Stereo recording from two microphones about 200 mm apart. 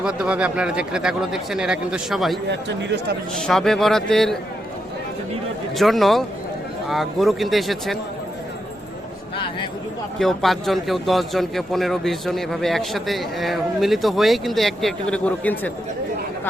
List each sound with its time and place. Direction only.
0.0 s speech: 5° right (ahead or behind)
2.5 s speech: 60° right (ahead or behind)
3.3 s speech: centre (ahead or behind)
5.7 s speech: centre (ahead or behind)
10.2 s speech: centre (ahead or behind)